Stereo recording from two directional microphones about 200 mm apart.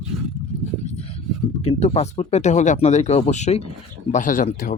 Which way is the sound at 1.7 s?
30° left (ahead or behind).